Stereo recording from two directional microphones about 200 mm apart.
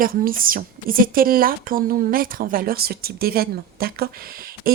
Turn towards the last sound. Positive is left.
turn(degrees=-45)  # may be behind; listen again after turning